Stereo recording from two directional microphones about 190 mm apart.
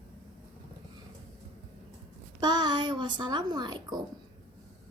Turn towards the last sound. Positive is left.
turn(degrees=-25)  # may be behind; listen again after turning